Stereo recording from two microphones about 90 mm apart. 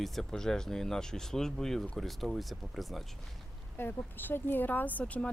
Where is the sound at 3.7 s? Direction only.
20° left (ahead or behind).